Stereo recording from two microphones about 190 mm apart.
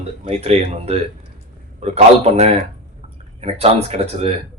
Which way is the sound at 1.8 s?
35° right (ahead or behind).